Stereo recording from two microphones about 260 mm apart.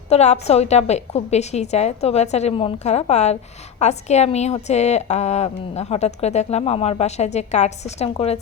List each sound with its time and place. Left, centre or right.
0.1 s a woman's voice: left